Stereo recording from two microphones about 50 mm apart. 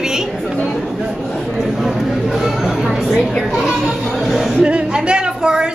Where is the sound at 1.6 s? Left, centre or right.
Centre.